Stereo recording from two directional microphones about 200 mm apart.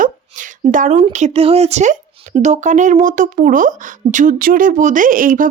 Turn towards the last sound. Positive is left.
turn(degrees=-45)  # may be behind; listen again after turning